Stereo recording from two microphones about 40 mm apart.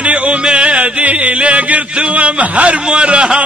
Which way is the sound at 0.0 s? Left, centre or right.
Right.